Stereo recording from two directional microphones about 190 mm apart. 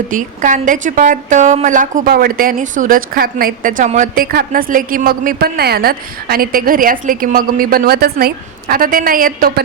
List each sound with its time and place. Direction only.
0.1 s a woman's voice: 45° right (ahead or behind)